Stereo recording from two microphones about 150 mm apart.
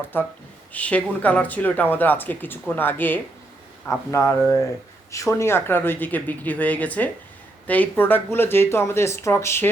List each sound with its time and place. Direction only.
0.1 s speech: 15° left (ahead or behind)